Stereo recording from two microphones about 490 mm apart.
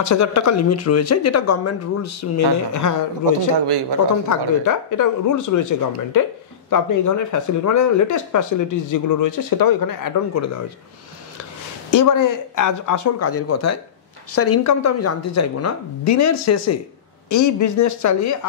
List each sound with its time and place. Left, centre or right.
0.0 s speech: left
3.5 s a man's voice: right
4.3 s speech: left
11.9 s speech: left